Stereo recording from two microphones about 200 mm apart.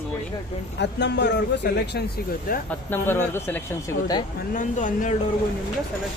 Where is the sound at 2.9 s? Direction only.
10° left (ahead or behind).